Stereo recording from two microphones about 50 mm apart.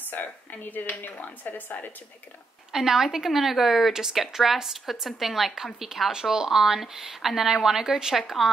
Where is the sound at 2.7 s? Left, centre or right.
Centre.